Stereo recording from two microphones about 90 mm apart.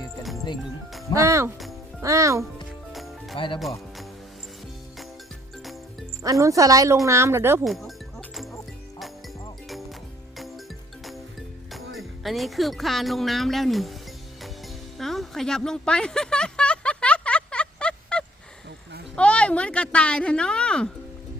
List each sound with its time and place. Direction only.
1.1 s a woman's voice: 35° right (ahead or behind)
2.9 s music: centre (ahead or behind)
3.3 s speech: 70° left (ahead or behind)
6.2 s a woman's voice: 40° right (ahead or behind)
7.6 s speech: centre (ahead or behind)
11.0 s music: centre (ahead or behind)
14.9 s a sound: centre (ahead or behind)